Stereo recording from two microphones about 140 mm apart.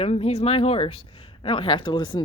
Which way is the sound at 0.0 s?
45° left (ahead or behind).